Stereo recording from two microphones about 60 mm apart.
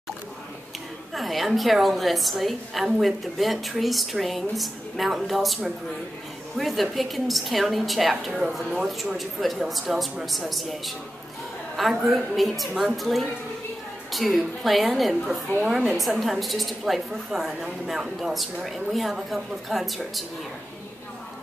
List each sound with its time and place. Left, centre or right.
1.1 s a woman's voice: centre
11.9 s a woman's voice: centre
15.2 s a woman's voice: right
15.7 s a woman's voice: centre